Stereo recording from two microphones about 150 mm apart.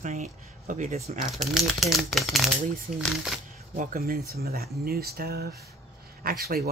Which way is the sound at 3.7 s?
65° right (ahead or behind).